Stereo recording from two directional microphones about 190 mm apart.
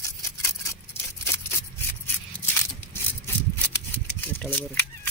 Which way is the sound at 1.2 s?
15° left (ahead or behind).